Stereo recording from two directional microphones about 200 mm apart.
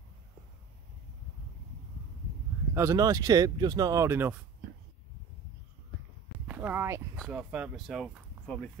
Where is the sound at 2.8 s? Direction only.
15° right (ahead or behind).